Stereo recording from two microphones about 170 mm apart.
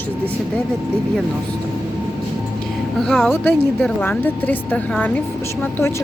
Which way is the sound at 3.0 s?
Centre (ahead or behind).